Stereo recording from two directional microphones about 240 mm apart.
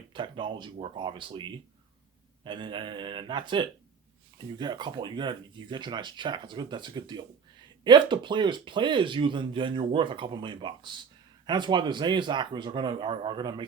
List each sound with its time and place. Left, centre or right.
0.1 s speech: centre